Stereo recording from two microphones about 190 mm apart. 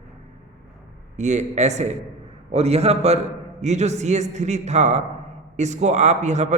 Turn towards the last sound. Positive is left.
turn(degrees=-40)  # may be behind; listen again after turning